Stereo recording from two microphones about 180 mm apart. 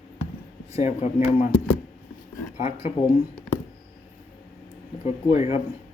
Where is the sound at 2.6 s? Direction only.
40° left (ahead or behind).